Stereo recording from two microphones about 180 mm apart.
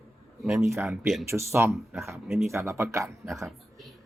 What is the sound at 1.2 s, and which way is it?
Speech, 15° right (ahead or behind).